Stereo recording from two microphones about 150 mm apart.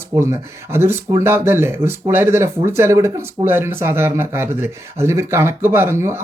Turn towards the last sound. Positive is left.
turn(degrees=-20)  # may be behind; listen again after turning